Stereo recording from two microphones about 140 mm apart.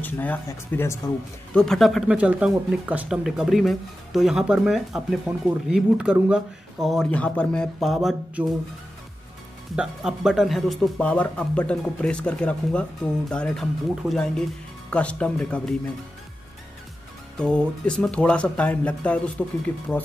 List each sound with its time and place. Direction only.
0.0 s speech: 10° left (ahead or behind)
1.5 s speech: 5° left (ahead or behind)
7.1 s speech: 10° left (ahead or behind)
9.8 s speech: 5° right (ahead or behind)
17.4 s speech: 5° left (ahead or behind)